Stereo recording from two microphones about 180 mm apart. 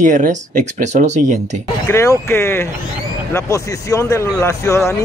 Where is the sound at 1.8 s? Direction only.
15° left (ahead or behind).